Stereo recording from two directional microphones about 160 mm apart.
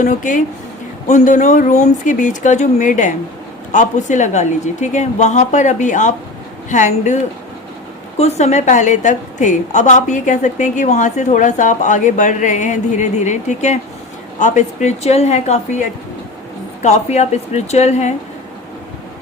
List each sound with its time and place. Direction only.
0.0 s a woman's voice: 55° left (ahead or behind)
8.2 s a woman's voice: 45° left (ahead or behind)
16.8 s a woman's voice: 45° left (ahead or behind)